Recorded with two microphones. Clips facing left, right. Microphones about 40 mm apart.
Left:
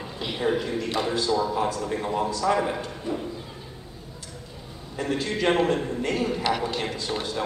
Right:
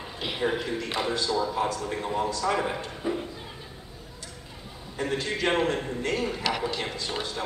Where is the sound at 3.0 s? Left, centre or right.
Centre.